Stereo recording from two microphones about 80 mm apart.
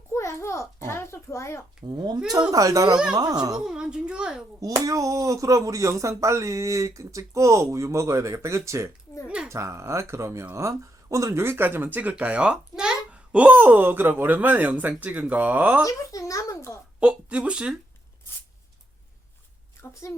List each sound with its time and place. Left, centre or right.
0.1 s a sound: left
1.9 s speech: right
2.5 s speech: right
3.6 s a sound: centre
4.6 s speech: right
11.4 s a child's voice: right
15.8 s a child's voice: left
17.0 s speech: centre
19.9 s a woman's voice: left